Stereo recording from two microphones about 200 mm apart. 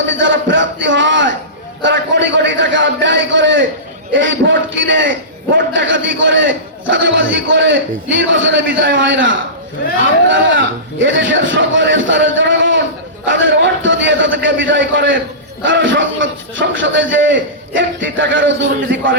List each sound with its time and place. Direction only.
0.1 s a sound: 65° right (ahead or behind)
1.8 s a man's voice: 65° right (ahead or behind)
18.6 s a man's voice: 40° right (ahead or behind)